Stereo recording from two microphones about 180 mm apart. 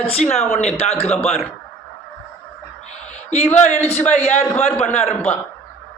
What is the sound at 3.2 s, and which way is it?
A man's voice, 40° left (ahead or behind).